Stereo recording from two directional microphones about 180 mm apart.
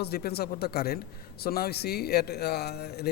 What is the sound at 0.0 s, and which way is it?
A man's voice, 60° left (ahead or behind).